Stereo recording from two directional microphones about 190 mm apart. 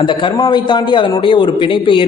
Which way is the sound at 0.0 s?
25° left (ahead or behind).